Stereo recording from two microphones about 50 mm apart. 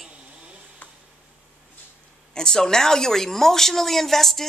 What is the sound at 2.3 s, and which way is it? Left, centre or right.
A woman's voice, centre.